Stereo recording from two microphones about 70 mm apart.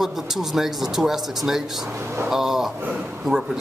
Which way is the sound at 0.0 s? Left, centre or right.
Centre.